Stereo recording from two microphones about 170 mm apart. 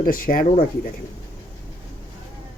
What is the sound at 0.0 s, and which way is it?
Speech, 55° left (ahead or behind).